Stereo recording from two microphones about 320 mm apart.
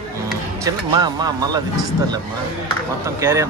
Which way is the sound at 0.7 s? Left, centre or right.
Centre.